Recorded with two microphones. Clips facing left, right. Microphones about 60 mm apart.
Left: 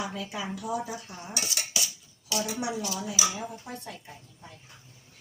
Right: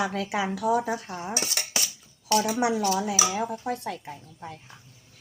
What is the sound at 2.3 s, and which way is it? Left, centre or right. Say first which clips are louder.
A woman's voice: right 8 dB; right.